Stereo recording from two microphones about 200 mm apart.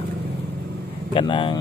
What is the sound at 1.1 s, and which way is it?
Speech, 25° left (ahead or behind).